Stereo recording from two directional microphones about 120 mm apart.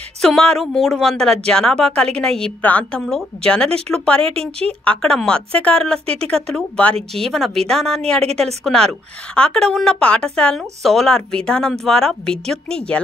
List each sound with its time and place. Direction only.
0.2 s a woman's voice: 5° left (ahead or behind)
4.3 s a woman's voice: 55° right (ahead or behind)
4.6 s a woman's voice: 10° left (ahead or behind)